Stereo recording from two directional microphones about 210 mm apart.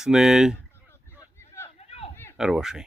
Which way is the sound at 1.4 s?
10° left (ahead or behind).